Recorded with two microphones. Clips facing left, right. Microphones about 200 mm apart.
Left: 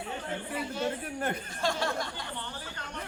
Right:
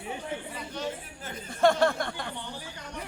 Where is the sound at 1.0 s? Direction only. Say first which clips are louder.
Left 8 dB; 60° left (ahead or behind).